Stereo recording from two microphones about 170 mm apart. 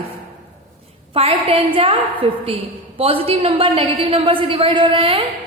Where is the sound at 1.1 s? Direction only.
35° right (ahead or behind).